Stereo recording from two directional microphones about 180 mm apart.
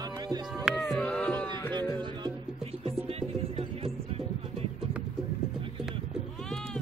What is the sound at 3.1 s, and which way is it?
Music, 30° right (ahead or behind).